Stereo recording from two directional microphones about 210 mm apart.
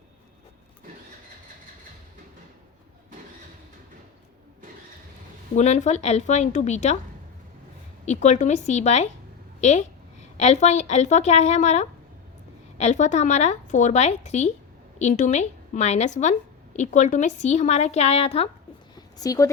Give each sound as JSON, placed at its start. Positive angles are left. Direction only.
{"t": 5.5, "sound": "a woman's voice", "side_deg": 35}
{"t": 8.0, "sound": "a woman's voice", "side_deg": 35}
{"t": 18.9, "sound": "a sound", "side_deg": 15}